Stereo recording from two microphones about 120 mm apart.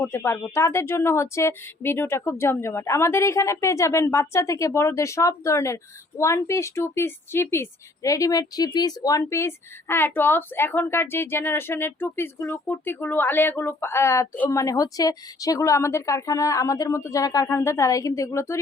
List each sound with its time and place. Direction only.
0.0 s speech: 20° left (ahead or behind)